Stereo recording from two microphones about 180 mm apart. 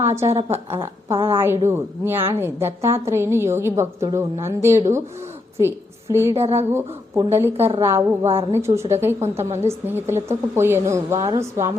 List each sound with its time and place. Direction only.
0.2 s a woman's voice: 35° right (ahead or behind)
0.7 s a woman's voice: 15° right (ahead or behind)
6.3 s a woman's voice: 35° right (ahead or behind)
6.7 s a woman's voice: 15° right (ahead or behind)
8.3 s a woman's voice: 30° right (ahead or behind)
8.5 s a woman's voice: 15° right (ahead or behind)